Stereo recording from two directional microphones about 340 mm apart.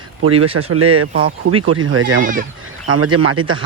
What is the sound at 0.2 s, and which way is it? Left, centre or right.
Speech, right.